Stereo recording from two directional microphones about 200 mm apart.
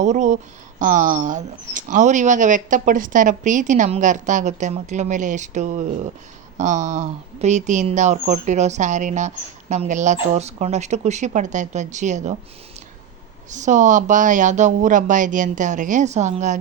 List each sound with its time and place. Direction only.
0.0 s speech: 35° right (ahead or behind)
13.5 s speech: 35° right (ahead or behind)